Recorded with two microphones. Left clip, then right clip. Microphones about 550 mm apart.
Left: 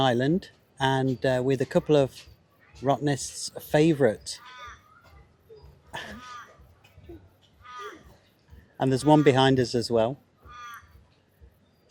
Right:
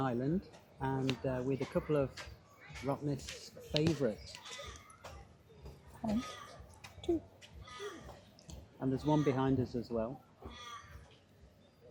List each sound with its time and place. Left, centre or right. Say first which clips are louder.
0.0 s a man's voice: left 13 dB; left
8.8 s a man's voice: left 13 dB; left